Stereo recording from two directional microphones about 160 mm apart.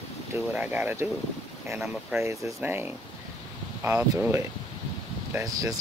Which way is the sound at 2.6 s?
10° right (ahead or behind).